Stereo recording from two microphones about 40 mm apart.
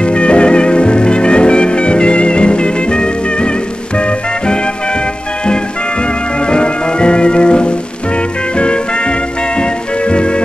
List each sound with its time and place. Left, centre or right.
0.0 s music: left